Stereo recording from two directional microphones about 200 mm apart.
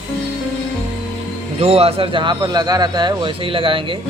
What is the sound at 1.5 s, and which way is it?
Speech, 30° right (ahead or behind).